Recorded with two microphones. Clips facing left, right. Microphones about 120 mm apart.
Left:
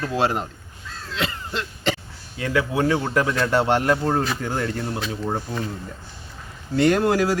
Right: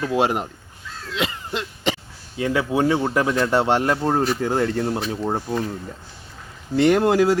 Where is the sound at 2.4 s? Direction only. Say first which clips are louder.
Right 2 dB; 25° right (ahead or behind).